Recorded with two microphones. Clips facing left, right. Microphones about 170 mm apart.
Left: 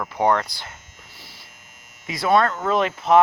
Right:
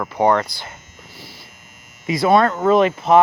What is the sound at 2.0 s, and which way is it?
Speech, 5° right (ahead or behind).